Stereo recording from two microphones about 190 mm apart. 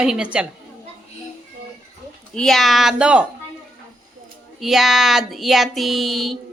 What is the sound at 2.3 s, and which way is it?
Speech, centre (ahead or behind).